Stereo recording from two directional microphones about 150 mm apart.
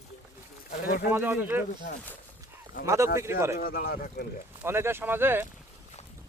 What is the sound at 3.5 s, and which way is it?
Speech, 75° left (ahead or behind).